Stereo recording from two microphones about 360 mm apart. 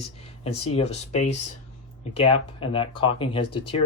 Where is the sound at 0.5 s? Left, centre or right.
Left.